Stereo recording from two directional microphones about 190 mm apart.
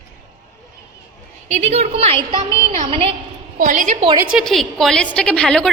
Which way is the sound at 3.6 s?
45° right (ahead or behind).